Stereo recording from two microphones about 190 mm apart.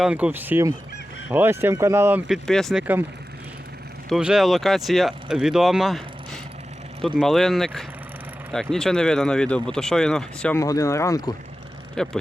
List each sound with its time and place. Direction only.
0.0 s speech: 5° right (ahead or behind)
4.1 s speech: 5° right (ahead or behind)
10.6 s speech: 15° left (ahead or behind)
12.0 s speech: 5° left (ahead or behind)